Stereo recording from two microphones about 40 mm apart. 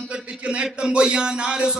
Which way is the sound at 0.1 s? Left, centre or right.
Right.